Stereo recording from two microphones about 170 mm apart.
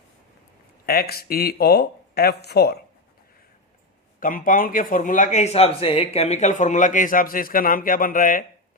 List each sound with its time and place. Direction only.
0.9 s speech: 65° left (ahead or behind)
4.2 s speech: 50° left (ahead or behind)